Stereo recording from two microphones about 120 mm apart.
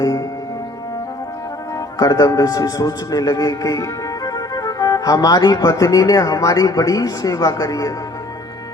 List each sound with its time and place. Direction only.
2.0 s a man's voice: 30° left (ahead or behind)